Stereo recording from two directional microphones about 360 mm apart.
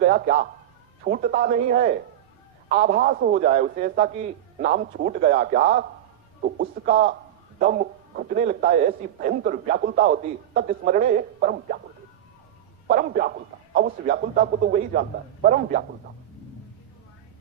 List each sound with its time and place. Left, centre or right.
0.0 s a man's voice: right
12.9 s a man's voice: right